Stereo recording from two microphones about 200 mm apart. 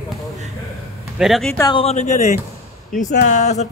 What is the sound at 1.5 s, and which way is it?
Speech, 25° left (ahead or behind).